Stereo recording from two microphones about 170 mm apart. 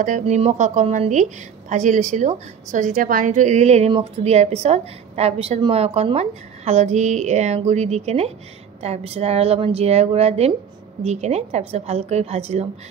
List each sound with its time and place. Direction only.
0.2 s a woman's voice: 40° right (ahead or behind)